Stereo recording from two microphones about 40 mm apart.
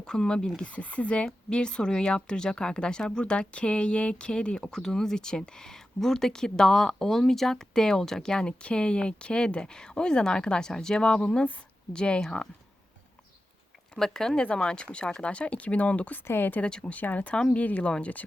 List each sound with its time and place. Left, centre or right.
0.0 s speech: centre
0.6 s speech: left
14.0 s speech: centre
14.4 s speech: left
16.2 s speech: left
16.6 s speech: left
16.9 s speech: left